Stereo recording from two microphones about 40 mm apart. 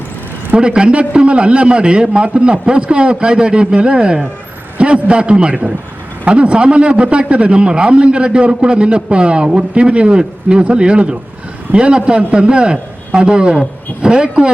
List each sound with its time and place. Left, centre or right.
0.5 s a man's voice: right